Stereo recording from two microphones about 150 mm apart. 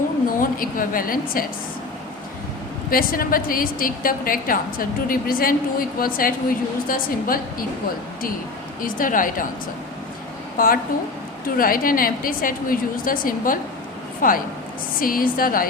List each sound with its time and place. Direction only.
0.3 s a woman's voice: 65° left (ahead or behind)
2.9 s a woman's voice: 70° left (ahead or behind)
8.8 s speech: 65° left (ahead or behind)
10.6 s a woman's voice: 75° left (ahead or behind)